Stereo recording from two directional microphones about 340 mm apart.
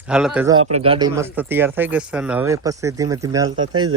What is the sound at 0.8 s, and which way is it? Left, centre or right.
Speech, centre.